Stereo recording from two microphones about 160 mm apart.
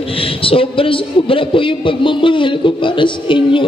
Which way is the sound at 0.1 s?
35° left (ahead or behind).